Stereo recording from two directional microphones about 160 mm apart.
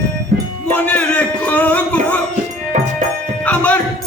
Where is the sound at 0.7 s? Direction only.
10° left (ahead or behind).